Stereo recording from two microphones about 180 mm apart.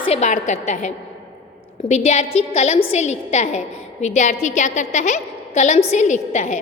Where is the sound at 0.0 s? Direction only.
35° left (ahead or behind).